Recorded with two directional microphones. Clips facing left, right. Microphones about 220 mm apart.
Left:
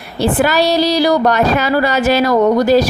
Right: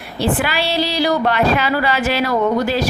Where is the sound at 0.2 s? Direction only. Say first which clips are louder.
Left 6 dB; 40° left (ahead or behind).